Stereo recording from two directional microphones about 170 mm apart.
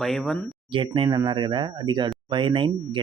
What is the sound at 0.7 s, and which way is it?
Speech, 30° right (ahead or behind).